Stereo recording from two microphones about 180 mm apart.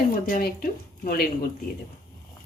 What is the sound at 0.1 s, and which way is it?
A woman's voice, 55° left (ahead or behind).